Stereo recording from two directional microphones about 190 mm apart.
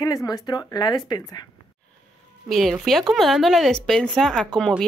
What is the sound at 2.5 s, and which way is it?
Speech, centre (ahead or behind).